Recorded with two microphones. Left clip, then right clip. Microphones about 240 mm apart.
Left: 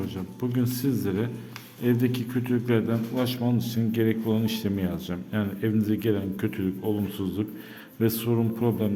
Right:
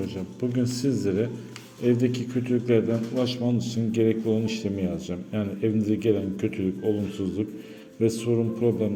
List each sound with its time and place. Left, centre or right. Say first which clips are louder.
0.5 s a man's voice: right 1 dB; centre